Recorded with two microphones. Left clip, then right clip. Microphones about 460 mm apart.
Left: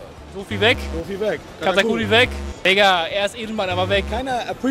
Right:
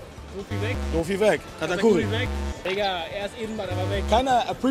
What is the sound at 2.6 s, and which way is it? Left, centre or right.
Speech, left.